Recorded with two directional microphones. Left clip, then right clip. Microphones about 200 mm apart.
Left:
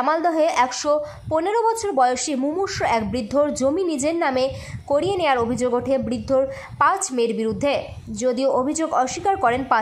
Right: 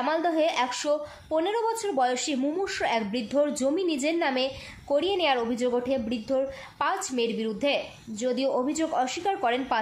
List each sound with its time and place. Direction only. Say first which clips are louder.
0.1 s a woman's voice: left 5 dB; 15° left (ahead or behind)